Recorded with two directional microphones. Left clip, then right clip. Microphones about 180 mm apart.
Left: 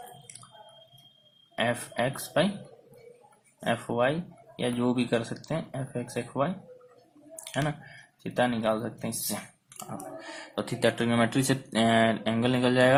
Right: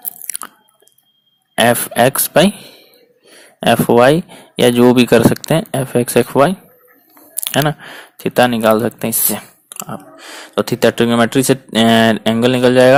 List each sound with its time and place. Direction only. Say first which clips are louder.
1.5 s speech: right 17 dB; 60° right (ahead or behind)
3.6 s speech: right 17 dB; 60° right (ahead or behind)
7.4 s a sound: right 16 dB; 60° right (ahead or behind)
8.2 s speech: right 15 dB; 60° right (ahead or behind)
10.5 s speech: right 14 dB; 45° right (ahead or behind)